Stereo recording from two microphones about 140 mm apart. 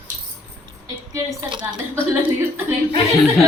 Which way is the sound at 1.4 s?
35° right (ahead or behind).